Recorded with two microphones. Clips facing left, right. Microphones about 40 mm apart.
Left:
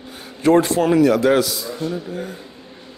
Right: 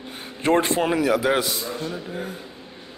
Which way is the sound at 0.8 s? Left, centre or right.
Centre.